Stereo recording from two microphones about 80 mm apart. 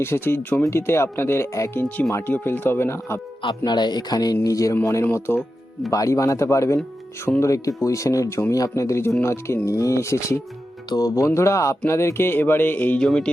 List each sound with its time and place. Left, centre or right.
0.0 s speech: left
2.2 s speech: left
3.4 s speech: left
4.4 s music: left
5.1 s speech: left
5.9 s speech: left
10.8 s music: left
11.3 s speech: left
13.0 s speech: centre